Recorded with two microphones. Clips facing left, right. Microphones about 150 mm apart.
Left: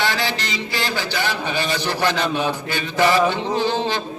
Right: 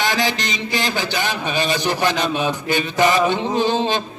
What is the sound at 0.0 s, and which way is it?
A man's voice, 15° right (ahead or behind).